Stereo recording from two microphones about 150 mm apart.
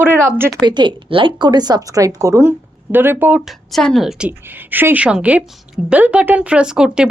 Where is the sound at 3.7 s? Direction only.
Centre (ahead or behind).